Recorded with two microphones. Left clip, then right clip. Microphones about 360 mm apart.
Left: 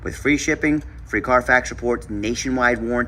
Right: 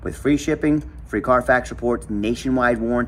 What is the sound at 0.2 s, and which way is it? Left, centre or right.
Speech, centre.